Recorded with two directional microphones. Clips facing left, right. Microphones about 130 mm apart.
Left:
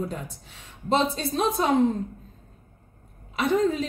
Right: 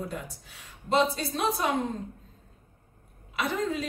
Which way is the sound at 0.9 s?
25° left (ahead or behind).